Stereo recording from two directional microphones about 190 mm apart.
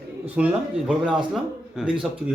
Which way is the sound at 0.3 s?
5° right (ahead or behind).